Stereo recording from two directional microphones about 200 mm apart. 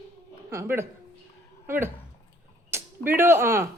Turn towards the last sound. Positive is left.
turn(degrees=-10)  # may be behind; listen again after turning